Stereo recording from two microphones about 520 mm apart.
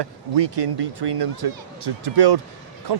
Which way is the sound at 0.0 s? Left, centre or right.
Right.